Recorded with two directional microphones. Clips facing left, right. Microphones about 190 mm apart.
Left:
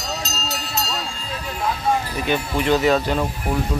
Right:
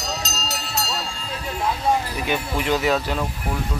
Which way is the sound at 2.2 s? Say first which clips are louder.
Left 4 dB; 10° right (ahead or behind).